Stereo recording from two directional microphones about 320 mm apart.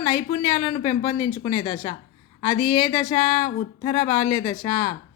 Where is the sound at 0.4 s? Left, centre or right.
Centre.